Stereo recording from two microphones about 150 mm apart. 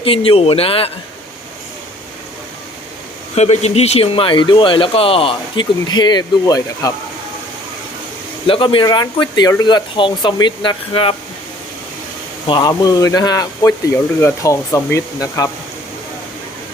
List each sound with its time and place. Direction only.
0.0 s speech: 40° left (ahead or behind)
3.3 s speech: 45° left (ahead or behind); by 6.9 s 25° left (ahead or behind)
8.4 s speech: 35° left (ahead or behind)
12.5 s speech: 30° left (ahead or behind)